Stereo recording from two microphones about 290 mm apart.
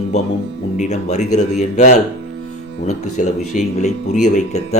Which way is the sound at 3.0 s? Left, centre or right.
Left.